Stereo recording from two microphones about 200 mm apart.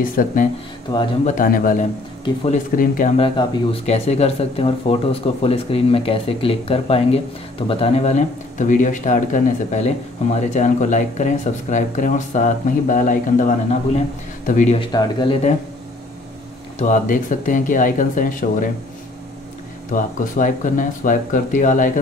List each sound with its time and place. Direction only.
0.0 s a man's voice: 45° left (ahead or behind)
0.9 s speech: 20° left (ahead or behind)
1.2 s a man's voice: 45° left (ahead or behind)
3.2 s speech: 30° left (ahead or behind)
14.8 s speech: 20° left (ahead or behind)
16.7 s speech: 40° left (ahead or behind)
19.9 s speech: 40° left (ahead or behind)